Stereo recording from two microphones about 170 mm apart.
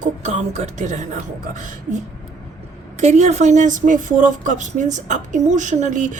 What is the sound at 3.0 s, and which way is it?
Speech, 40° right (ahead or behind).